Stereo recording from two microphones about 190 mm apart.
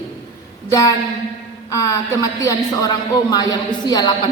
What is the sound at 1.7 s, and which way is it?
A woman's voice, 15° left (ahead or behind).